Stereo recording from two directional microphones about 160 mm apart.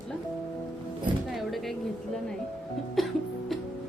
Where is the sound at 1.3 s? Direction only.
Centre (ahead or behind).